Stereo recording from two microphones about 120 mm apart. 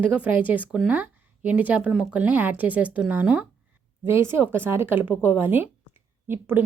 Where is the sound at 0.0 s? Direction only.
10° right (ahead or behind).